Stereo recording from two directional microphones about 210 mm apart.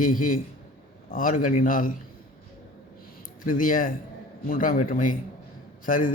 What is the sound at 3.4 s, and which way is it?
A man's voice, 40° left (ahead or behind).